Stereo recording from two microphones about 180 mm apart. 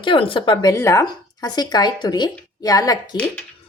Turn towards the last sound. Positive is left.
turn(degrees=20)  # may be behind; listen again after turning